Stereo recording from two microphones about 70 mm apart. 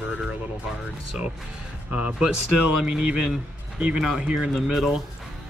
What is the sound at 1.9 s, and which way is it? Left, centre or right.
Speech, centre.